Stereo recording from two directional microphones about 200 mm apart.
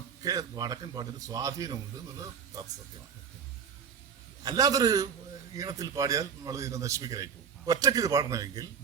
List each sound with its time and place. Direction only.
0.2 s a man's voice: 15° right (ahead or behind)
4.4 s a man's voice: 20° right (ahead or behind)